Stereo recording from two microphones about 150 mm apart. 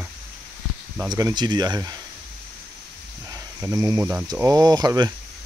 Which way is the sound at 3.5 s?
20° right (ahead or behind).